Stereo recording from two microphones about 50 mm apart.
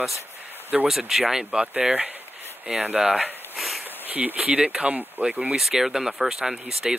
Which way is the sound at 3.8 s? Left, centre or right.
Right.